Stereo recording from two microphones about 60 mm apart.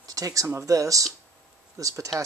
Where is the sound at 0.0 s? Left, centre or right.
Right.